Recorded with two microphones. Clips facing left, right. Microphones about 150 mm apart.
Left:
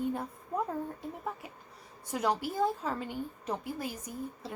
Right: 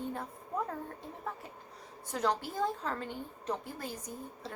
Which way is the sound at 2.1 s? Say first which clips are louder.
Left 2 dB; 10° left (ahead or behind).